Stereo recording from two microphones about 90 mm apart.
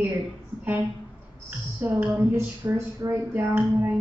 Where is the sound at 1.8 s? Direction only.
20° right (ahead or behind).